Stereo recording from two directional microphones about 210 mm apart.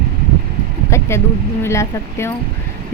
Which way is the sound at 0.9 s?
15° left (ahead or behind).